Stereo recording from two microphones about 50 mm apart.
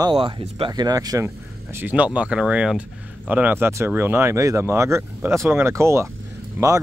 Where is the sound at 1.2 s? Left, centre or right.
Right.